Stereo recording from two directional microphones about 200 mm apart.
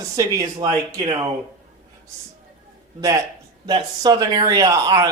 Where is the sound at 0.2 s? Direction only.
20° right (ahead or behind).